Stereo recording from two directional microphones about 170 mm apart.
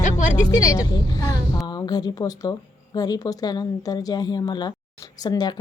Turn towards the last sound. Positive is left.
turn(degrees=25)  # may be behind; listen again after turning